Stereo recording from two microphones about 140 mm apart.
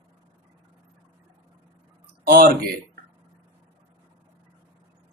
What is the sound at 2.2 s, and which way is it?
Speech, 90° right.